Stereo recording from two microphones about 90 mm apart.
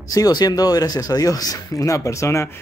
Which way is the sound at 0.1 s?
45° left (ahead or behind).